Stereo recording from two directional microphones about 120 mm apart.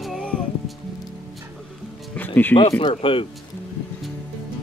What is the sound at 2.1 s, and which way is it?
Music, 15° left (ahead or behind).